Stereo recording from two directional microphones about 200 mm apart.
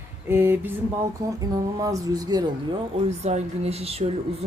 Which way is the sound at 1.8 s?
15° right (ahead or behind).